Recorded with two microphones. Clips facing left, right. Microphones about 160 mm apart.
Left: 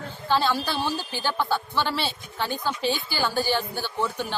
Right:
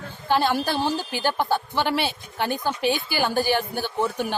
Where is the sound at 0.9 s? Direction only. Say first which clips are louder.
Right 3 dB; 15° right (ahead or behind).